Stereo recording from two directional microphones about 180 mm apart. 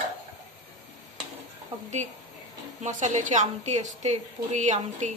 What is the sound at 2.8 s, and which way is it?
A woman's voice, 40° right (ahead or behind).